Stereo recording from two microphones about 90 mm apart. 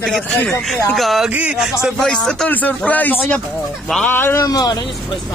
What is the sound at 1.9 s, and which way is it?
A man's voice, 5° left (ahead or behind).